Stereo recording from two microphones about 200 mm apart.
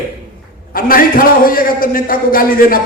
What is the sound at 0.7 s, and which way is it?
A man's voice, 45° left (ahead or behind).